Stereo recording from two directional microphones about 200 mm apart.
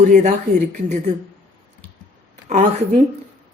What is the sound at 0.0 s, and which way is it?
A woman's voice, 40° right (ahead or behind).